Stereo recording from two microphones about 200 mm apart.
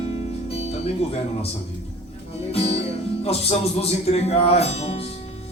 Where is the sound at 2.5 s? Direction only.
30° left (ahead or behind).